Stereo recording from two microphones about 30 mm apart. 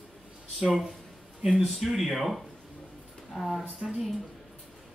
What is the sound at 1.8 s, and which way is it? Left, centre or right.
Speech, centre.